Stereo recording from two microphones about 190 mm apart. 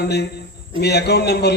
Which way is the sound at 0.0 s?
60° left (ahead or behind).